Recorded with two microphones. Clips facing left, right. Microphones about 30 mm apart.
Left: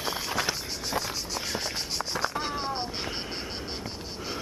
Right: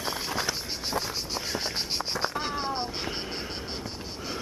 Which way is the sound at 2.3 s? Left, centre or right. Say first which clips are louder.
Right 1 dB; centre.